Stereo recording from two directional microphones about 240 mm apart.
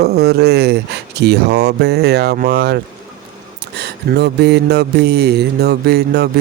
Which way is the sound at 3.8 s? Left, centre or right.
Right.